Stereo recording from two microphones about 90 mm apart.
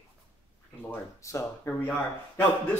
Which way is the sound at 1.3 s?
35° left (ahead or behind).